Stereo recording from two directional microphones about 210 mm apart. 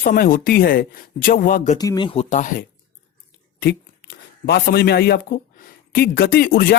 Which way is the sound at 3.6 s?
50° left (ahead or behind).